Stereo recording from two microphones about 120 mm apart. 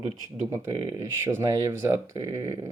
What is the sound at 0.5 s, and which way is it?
Speech, 35° right (ahead or behind).